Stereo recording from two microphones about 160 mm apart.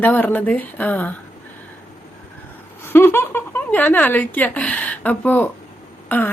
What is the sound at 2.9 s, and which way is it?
A woman's voice, 15° left (ahead or behind).